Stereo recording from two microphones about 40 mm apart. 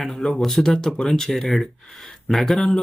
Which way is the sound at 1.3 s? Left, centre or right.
Centre.